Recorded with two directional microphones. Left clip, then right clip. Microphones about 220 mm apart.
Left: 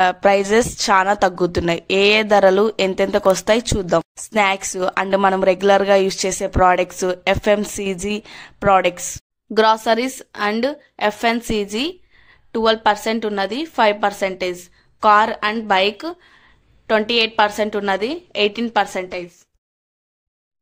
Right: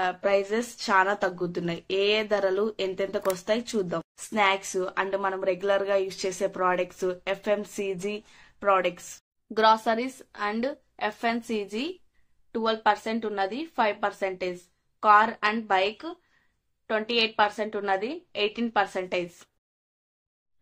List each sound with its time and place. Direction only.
0.0 s a woman's voice: 50° left (ahead or behind)